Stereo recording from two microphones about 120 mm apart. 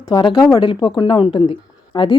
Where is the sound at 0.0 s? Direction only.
35° left (ahead or behind).